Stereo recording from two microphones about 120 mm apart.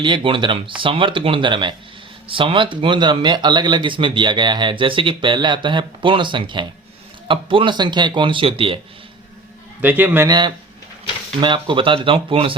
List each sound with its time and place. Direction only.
0.0 s speech: 45° right (ahead or behind)
9.8 s a man's voice: 15° right (ahead or behind)
10.2 s speech: 35° right (ahead or behind)